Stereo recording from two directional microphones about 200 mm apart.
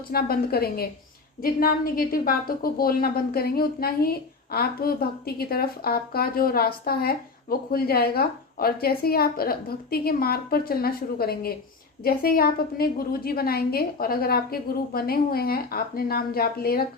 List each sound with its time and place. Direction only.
0.1 s a woman's voice: 50° left (ahead or behind)